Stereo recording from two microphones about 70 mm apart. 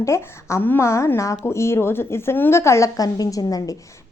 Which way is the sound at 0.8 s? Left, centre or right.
Left.